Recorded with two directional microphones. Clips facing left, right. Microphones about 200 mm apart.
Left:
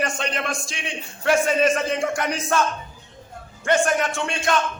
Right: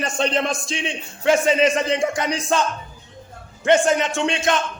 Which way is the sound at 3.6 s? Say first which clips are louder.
Right 3 dB; 20° right (ahead or behind).